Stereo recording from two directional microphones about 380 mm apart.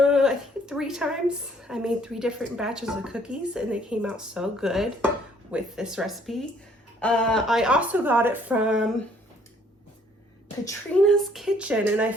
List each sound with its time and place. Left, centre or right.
0.0 s a sound: centre
1.6 s a woman's voice: centre
10.7 s a woman's voice: centre